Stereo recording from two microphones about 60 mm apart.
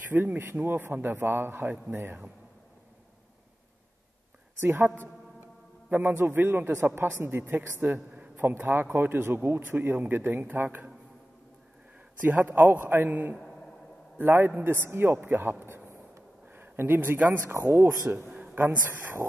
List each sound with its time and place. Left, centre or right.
0.1 s speech: right
4.6 s a woman's voice: right
8.5 s speech: right
12.2 s speech: right
15.6 s a sound: right
17.2 s speech: right